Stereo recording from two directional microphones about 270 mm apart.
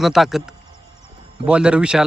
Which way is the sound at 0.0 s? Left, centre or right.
Centre.